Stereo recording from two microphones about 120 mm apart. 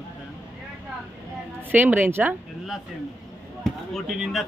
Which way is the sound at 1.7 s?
15° right (ahead or behind).